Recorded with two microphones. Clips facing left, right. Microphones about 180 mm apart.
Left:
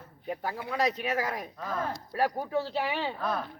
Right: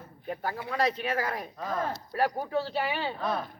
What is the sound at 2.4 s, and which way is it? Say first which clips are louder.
Speech: even; 15° left (ahead or behind).